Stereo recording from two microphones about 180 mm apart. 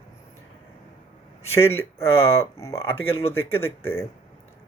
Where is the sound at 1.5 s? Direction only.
15° left (ahead or behind).